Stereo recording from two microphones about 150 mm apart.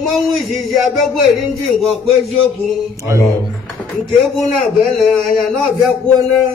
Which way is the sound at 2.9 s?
20° right (ahead or behind).